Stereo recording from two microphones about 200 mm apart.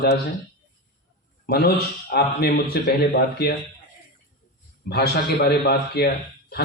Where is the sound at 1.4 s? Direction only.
50° left (ahead or behind).